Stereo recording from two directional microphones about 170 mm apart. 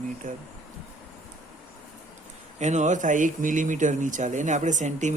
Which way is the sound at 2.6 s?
45° right (ahead or behind).